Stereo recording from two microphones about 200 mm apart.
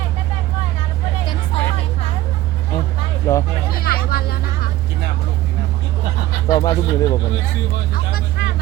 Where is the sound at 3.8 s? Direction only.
50° left (ahead or behind).